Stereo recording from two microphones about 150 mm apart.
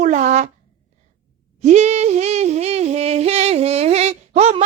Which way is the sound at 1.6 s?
50° right (ahead or behind).